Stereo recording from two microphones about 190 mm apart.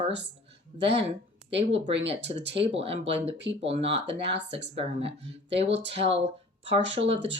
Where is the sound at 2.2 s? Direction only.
65° right (ahead or behind).